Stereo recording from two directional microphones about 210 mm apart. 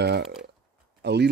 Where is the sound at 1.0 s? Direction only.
55° right (ahead or behind).